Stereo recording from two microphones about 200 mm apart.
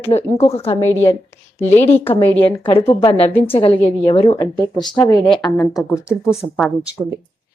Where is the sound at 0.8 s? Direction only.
10° left (ahead or behind).